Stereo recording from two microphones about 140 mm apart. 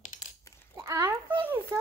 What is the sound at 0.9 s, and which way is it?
Speech, 20° right (ahead or behind).